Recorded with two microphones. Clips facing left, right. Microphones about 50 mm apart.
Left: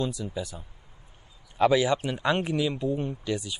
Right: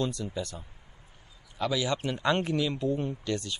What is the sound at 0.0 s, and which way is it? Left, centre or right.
Speech, centre.